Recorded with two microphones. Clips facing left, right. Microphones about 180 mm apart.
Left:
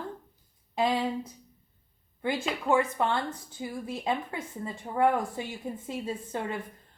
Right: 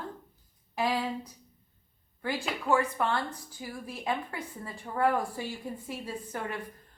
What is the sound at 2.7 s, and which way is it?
A woman's voice, 20° left (ahead or behind).